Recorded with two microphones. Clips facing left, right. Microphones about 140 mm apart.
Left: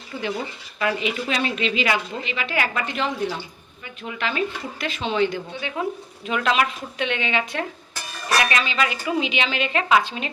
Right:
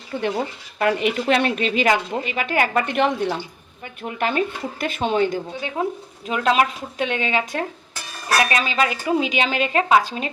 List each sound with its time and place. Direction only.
0.8 s a woman's voice: 55° right (ahead or behind)
4.0 s a woman's voice: 50° right (ahead or behind)